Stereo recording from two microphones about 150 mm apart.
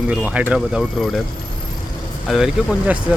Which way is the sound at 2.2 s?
5° right (ahead or behind).